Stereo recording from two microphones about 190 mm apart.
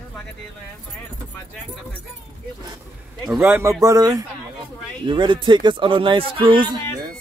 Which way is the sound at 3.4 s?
10° right (ahead or behind).